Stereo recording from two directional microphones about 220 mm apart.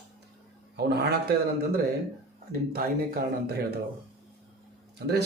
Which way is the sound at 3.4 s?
45° right (ahead or behind).